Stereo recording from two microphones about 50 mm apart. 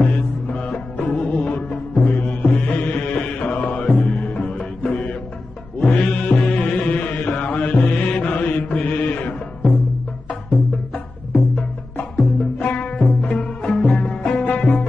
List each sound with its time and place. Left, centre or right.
0.0 s music: left
7.9 s mantra: left
8.2 s music: left
11.3 s music: left